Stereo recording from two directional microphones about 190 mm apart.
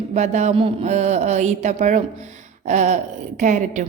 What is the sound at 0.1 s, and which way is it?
A woman's voice, 35° right (ahead or behind).